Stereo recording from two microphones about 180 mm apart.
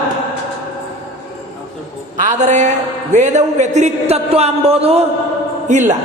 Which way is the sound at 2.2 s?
40° right (ahead or behind).